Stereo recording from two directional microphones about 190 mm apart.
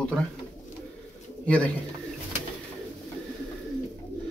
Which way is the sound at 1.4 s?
5° left (ahead or behind).